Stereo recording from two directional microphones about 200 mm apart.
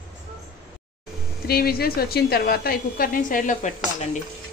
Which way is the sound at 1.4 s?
50° left (ahead or behind).